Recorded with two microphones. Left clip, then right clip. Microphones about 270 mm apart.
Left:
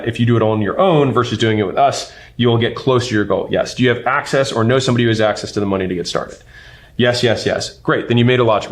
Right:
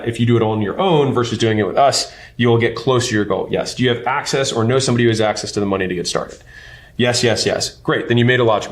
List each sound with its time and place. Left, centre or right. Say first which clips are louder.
0.3 s speech: left 2 dB; left